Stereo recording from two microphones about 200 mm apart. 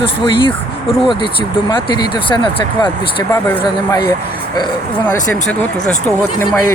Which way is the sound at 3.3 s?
10° left (ahead or behind).